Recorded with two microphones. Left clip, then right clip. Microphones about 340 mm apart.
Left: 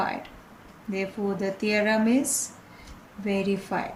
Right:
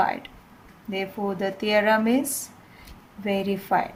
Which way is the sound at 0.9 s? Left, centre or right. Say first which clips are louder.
Right 1 dB; right.